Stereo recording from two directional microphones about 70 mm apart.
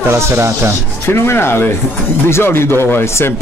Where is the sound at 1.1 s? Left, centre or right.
Left.